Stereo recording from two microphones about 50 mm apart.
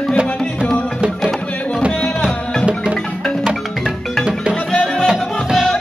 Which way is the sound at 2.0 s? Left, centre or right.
Centre.